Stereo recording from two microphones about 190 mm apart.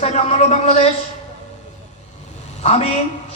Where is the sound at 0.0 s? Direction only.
35° left (ahead or behind).